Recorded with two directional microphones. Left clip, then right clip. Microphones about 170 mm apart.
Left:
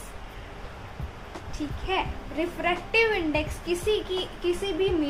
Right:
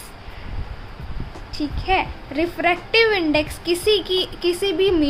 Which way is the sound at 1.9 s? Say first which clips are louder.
Right 8 dB; 70° right (ahead or behind).